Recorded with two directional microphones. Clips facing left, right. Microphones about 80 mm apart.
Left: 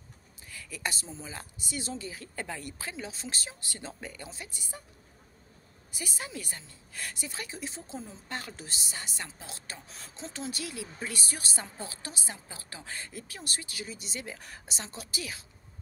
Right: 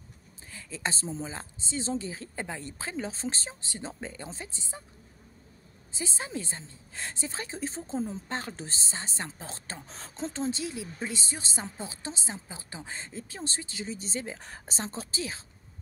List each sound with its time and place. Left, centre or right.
0.5 s a woman's voice: right
5.9 s a woman's voice: right